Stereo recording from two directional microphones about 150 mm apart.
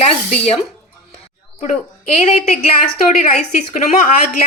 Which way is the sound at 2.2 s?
50° left (ahead or behind).